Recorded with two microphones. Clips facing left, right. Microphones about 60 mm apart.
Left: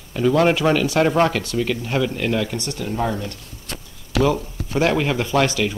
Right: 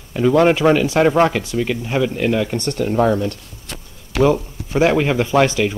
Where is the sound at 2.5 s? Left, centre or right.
Right.